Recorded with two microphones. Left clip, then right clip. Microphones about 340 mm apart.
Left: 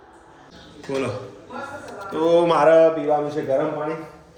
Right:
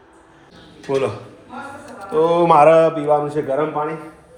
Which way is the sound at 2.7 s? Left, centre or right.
Right.